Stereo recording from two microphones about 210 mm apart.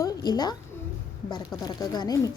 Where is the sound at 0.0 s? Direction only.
15° left (ahead or behind).